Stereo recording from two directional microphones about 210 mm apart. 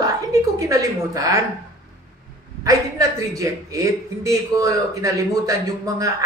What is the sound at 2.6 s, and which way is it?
A man's voice, 15° right (ahead or behind).